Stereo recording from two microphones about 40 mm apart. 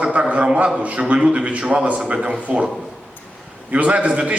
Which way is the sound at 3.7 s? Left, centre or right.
Right.